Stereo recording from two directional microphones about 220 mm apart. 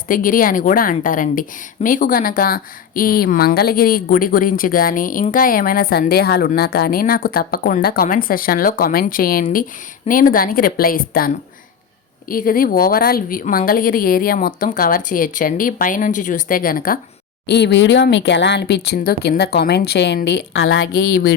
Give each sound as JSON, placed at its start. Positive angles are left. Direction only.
{"t": 0.1, "sound": "a woman's voice", "side_deg": 40}
{"t": 12.3, "sound": "a woman's voice", "side_deg": 40}